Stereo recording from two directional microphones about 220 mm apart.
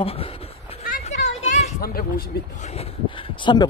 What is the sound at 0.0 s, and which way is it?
Speech, 25° left (ahead or behind).